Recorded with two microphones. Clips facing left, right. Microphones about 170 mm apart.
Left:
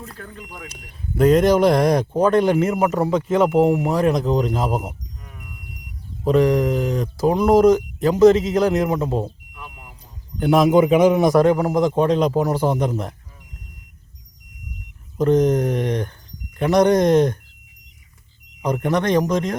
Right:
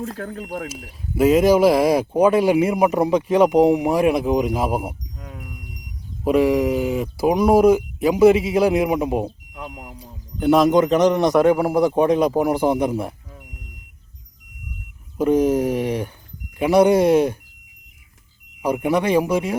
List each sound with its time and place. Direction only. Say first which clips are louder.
0.4 s speech: right 9 dB; 40° right (ahead or behind)
0.7 s speech: right 1 dB; 5° right (ahead or behind)
6.2 s speech: even; 10° right (ahead or behind)
10.0 s a man's voice: right 1 dB; centre (ahead or behind)
11.3 s speech: even; 10° right (ahead or behind)
15.2 s speech: even; 10° right (ahead or behind)
18.6 s speech: right 1 dB; 10° right (ahead or behind)